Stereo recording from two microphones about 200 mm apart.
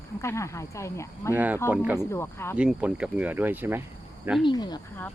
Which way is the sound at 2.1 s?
10° left (ahead or behind).